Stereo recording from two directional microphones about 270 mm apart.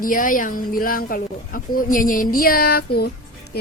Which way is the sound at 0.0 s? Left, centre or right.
Left.